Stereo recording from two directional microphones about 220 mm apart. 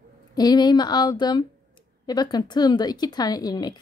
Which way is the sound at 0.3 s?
20° left (ahead or behind).